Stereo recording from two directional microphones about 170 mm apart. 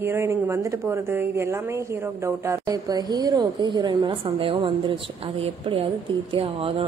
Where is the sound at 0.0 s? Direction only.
15° right (ahead or behind).